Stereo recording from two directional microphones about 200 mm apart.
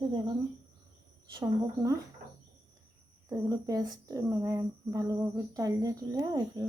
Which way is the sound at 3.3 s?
15° right (ahead or behind).